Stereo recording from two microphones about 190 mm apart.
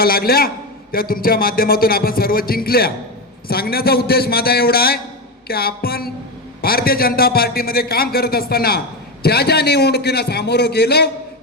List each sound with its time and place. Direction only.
0.0 s a man's voice: 50° left (ahead or behind)